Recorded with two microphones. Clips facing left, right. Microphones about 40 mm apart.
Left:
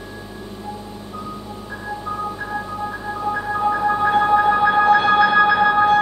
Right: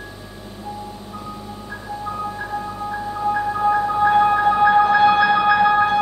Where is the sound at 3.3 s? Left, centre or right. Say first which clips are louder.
Right 2 dB; centre.